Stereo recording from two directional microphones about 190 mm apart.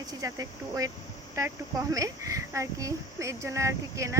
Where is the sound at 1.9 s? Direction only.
15° right (ahead or behind).